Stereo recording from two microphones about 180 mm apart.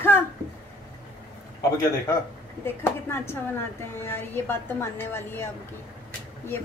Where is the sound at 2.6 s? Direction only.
10° left (ahead or behind).